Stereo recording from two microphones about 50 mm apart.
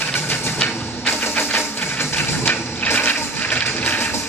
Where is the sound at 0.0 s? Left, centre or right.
Left.